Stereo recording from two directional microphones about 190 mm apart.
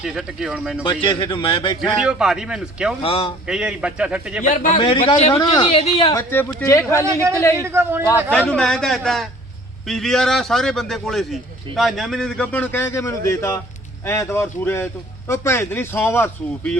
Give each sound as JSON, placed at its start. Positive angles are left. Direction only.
{"t": 0.0, "sound": "a man's voice", "side_deg": -5}
{"t": 0.9, "sound": "a woman's voice", "side_deg": 25}
{"t": 1.8, "sound": "a man's voice", "side_deg": -5}
{"t": 3.0, "sound": "a woman's voice", "side_deg": 30}
{"t": 3.4, "sound": "a man's voice", "side_deg": -5}
{"t": 4.4, "sound": "a man's voice", "side_deg": 40}
{"t": 4.8, "sound": "a woman's voice", "side_deg": 30}
{"t": 6.1, "sound": "speech", "side_deg": 15}
{"t": 7.0, "sound": "a man's voice", "side_deg": -15}
{"t": 8.0, "sound": "a man's voice", "side_deg": 10}